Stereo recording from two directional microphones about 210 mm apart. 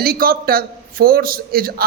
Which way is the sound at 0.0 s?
45° right (ahead or behind).